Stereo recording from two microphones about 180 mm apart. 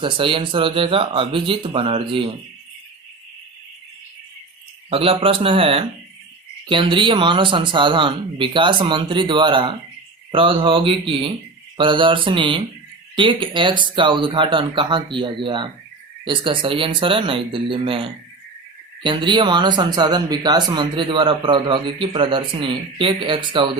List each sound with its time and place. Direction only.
0.0 s speech: 30° right (ahead or behind)
4.9 s speech: 30° right (ahead or behind)